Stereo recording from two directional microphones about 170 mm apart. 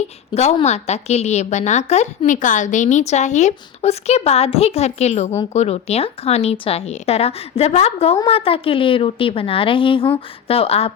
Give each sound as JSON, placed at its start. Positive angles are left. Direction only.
{"t": 0.3, "sound": "a woman's voice", "side_deg": 40}